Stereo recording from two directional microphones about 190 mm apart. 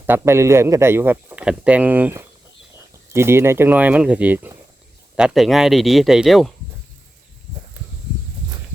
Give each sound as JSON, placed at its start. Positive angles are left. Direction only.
{"t": 0.0, "sound": "speech", "side_deg": -10}